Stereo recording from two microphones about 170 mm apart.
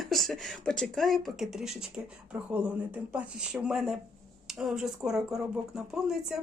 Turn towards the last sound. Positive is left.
turn(degrees=-5)  # may be behind; listen again after turning